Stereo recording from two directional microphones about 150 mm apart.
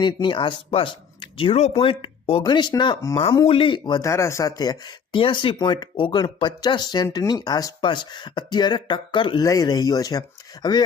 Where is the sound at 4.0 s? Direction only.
20° left (ahead or behind).